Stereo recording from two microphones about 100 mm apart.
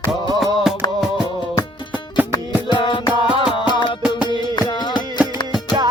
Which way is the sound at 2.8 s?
55° left (ahead or behind).